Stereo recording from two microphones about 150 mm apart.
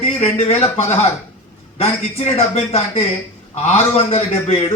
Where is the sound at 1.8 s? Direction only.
45° left (ahead or behind).